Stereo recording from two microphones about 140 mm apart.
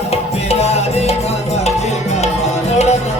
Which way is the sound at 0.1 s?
50° left (ahead or behind).